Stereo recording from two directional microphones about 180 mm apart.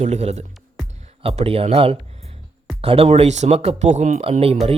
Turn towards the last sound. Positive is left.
turn(degrees=-35)  # may be behind; listen again after turning